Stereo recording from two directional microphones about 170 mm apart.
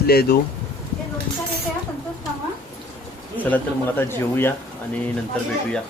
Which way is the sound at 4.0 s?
15° left (ahead or behind).